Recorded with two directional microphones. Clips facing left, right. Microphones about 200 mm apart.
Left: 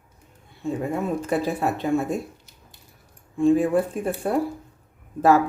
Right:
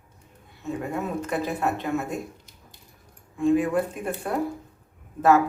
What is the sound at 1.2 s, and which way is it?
Speech, 30° left (ahead or behind).